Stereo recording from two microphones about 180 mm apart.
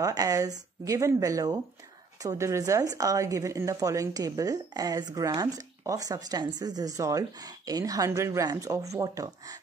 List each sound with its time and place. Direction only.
0.0 s a woman's voice: 20° right (ahead or behind)